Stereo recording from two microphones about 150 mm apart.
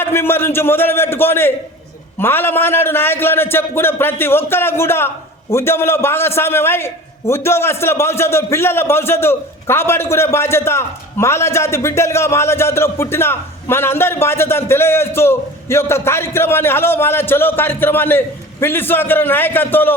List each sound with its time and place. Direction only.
0.0 s a man's voice: 15° left (ahead or behind)